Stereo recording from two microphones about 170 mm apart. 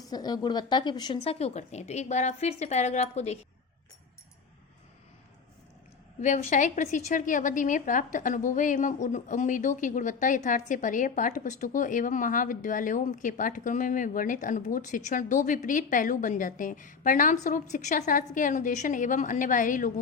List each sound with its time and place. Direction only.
0.0 s a woman's voice: 25° left (ahead or behind); by 3.3 s 40° left (ahead or behind)
6.2 s a woman's voice: 45° left (ahead or behind)